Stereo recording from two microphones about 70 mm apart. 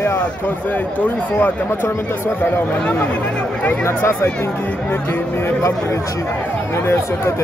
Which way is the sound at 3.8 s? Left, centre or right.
Left.